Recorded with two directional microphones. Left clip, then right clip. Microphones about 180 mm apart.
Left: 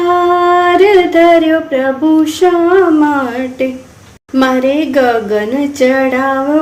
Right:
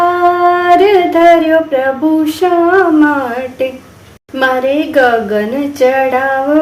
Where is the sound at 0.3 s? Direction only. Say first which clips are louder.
Even; 20° left (ahead or behind).